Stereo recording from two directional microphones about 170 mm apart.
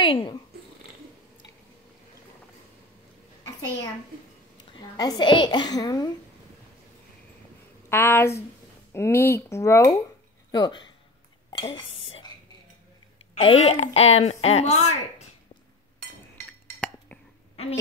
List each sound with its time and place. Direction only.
0.0 s purr: 25° left (ahead or behind)
4.7 s a woman's voice: 25° left (ahead or behind)
7.9 s a woman's voice: 15° left (ahead or behind); by 12.1 s 35° left (ahead or behind)
13.3 s a woman's voice: 40° left (ahead or behind)